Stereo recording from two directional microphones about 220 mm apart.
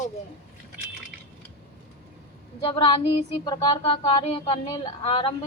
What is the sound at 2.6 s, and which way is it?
A woman's voice, 25° left (ahead or behind).